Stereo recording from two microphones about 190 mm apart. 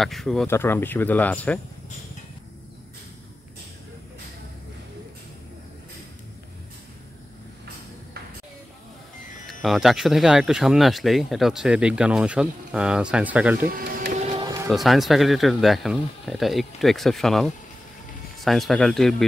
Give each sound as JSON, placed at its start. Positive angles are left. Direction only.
{"t": 0.0, "sound": "speech", "side_deg": 0}
{"t": 0.5, "sound": "speech", "side_deg": 10}
{"t": 9.5, "sound": "speech", "side_deg": 0}
{"t": 13.7, "sound": "printer", "side_deg": -50}
{"t": 14.4, "sound": "music", "side_deg": -20}
{"t": 14.7, "sound": "speech", "side_deg": 0}